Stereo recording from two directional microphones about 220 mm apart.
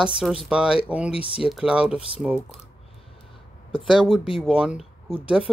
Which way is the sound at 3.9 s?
Centre (ahead or behind).